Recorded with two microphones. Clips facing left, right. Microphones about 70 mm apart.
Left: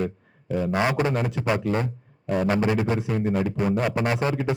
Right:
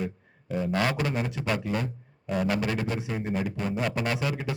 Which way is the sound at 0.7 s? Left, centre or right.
Centre.